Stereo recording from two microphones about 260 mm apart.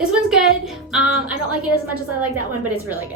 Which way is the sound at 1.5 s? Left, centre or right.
Right.